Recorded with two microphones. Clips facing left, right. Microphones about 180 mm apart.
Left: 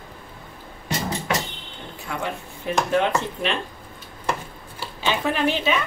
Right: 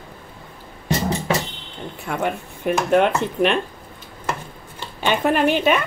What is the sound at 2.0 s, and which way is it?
Speech, 55° right (ahead or behind).